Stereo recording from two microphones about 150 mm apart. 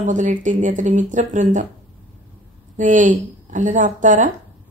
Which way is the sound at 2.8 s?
55° right (ahead or behind).